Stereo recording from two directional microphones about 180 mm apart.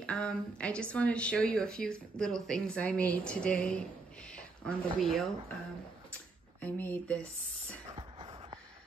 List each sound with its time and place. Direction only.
0.0 s speech: 5° left (ahead or behind)
6.6 s speech: 10° left (ahead or behind)
7.9 s a sound: 30° right (ahead or behind)